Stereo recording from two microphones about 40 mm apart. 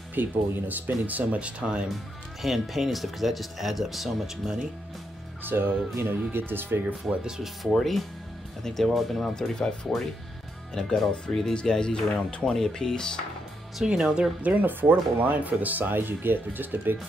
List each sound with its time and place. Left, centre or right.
0.1 s speech: right
1.6 s speech: right
2.4 s speech: centre
5.4 s speech: right
7.6 s speech: centre
13.8 s speech: centre
14.4 s speech: right
15.9 s speech: right